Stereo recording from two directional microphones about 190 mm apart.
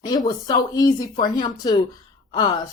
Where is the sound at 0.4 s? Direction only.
20° left (ahead or behind).